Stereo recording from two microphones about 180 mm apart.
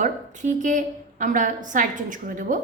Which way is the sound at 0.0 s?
45° right (ahead or behind).